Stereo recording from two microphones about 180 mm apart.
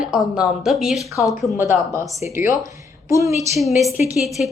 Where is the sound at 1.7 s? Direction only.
15° right (ahead or behind).